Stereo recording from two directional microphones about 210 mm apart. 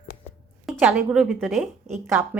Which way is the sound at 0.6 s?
5° right (ahead or behind).